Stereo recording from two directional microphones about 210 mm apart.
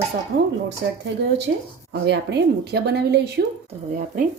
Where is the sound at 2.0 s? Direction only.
55° right (ahead or behind).